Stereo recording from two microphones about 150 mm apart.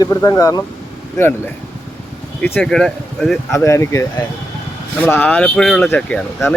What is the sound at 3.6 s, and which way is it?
Speech, 20° left (ahead or behind).